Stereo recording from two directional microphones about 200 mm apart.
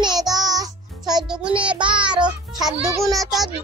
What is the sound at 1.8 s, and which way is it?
Child singing, 25° right (ahead or behind).